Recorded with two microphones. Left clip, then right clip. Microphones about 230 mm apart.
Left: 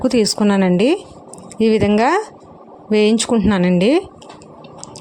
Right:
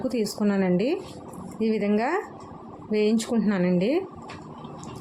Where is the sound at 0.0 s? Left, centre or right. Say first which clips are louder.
Left 11 dB; left.